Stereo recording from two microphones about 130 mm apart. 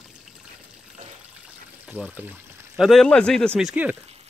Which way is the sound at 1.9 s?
10° right (ahead or behind).